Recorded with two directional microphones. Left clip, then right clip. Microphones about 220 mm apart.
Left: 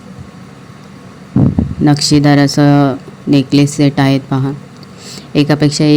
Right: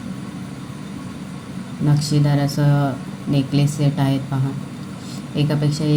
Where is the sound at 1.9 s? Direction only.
40° left (ahead or behind).